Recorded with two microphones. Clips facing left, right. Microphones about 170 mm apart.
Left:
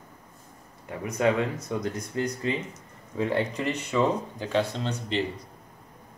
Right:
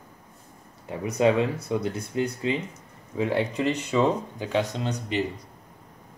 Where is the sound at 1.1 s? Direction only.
20° right (ahead or behind).